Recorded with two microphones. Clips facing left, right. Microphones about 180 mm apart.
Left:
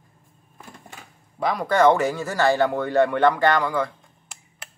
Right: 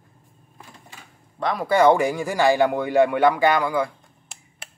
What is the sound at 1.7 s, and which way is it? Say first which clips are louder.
Speech: right 1 dB; 10° right (ahead or behind).